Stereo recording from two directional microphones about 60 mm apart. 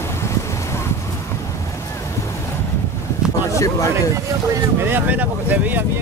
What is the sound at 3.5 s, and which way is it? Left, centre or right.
Speech, left.